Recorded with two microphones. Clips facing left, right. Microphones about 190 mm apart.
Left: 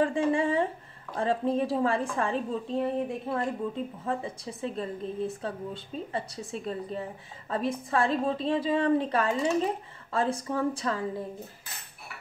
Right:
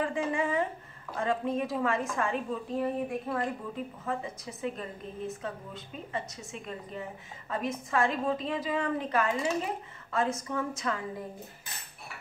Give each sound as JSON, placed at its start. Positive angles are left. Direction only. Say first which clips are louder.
{"t": 0.0, "sound": "a woman's voice", "louder": "left 5 dB", "side_deg": 30}